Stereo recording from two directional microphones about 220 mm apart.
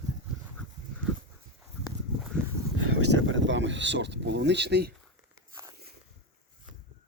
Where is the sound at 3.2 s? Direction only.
60° right (ahead or behind).